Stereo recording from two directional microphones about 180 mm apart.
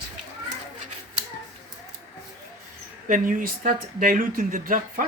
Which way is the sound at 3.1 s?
45° right (ahead or behind).